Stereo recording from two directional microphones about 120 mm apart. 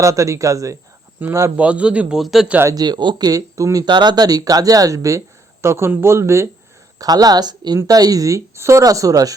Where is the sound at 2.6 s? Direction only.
30° right (ahead or behind).